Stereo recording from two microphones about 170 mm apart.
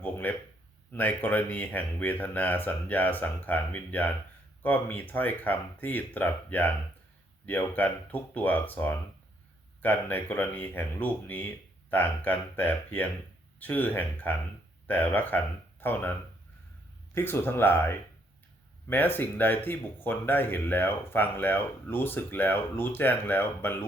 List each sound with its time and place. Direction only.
0.0 s speech: 10° left (ahead or behind)
17.2 s speech: 15° left (ahead or behind)